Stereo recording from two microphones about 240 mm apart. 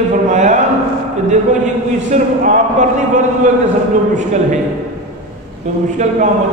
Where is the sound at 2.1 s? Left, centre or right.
Right.